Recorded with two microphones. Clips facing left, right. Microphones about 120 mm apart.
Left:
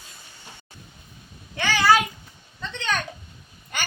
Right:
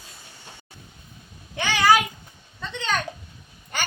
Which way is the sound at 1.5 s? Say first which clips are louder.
Even; 15° right (ahead or behind).